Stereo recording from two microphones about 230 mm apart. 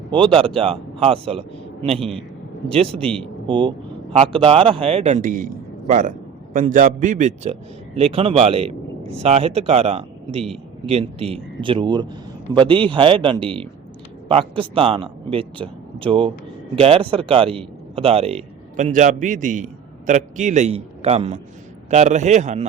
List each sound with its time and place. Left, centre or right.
0.1 s a man's voice: right
3.5 s a man's voice: right